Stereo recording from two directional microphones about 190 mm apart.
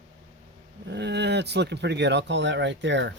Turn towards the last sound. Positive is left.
turn(degrees=-70)  # may be behind; listen again after turning